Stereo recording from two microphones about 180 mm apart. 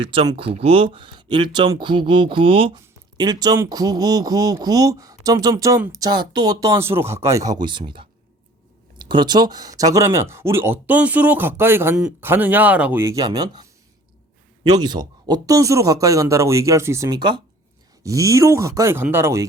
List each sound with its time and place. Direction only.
0.0 s speech: 30° right (ahead or behind)
14.7 s speech: 20° right (ahead or behind)